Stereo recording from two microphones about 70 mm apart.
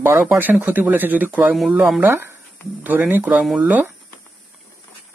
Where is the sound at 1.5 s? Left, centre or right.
Centre.